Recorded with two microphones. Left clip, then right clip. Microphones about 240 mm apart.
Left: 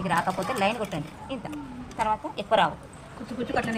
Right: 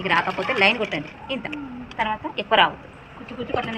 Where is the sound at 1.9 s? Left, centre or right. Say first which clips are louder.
Right 2 dB; left.